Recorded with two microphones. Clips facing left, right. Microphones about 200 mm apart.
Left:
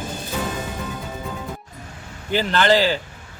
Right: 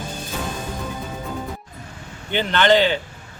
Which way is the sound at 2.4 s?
35° left (ahead or behind).